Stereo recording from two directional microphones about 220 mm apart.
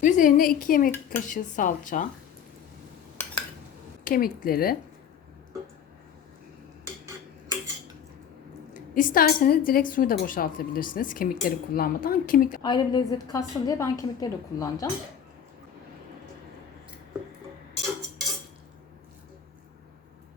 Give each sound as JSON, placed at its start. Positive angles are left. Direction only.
{"t": 0.0, "sound": "a woman's voice", "side_deg": 35}
{"t": 0.9, "sound": "a woman's voice", "side_deg": 10}
{"t": 1.3, "sound": "a woman's voice", "side_deg": 35}
{"t": 4.0, "sound": "a woman's voice", "side_deg": 40}
{"t": 8.7, "sound": "a woman's voice", "side_deg": 40}
{"t": 12.6, "sound": "a woman's voice", "side_deg": 20}